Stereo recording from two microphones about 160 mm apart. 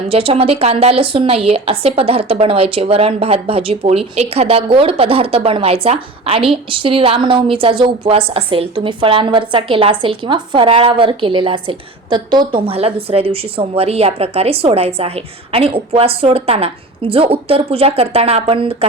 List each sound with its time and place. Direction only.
0.1 s a woman's voice: 35° right (ahead or behind)